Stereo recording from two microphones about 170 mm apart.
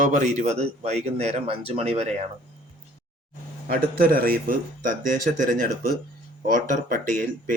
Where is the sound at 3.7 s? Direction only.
60° right (ahead or behind).